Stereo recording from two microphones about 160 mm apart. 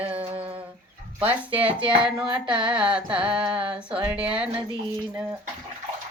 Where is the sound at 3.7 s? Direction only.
5° right (ahead or behind).